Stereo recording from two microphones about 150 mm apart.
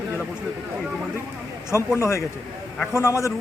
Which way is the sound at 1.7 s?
15° left (ahead or behind).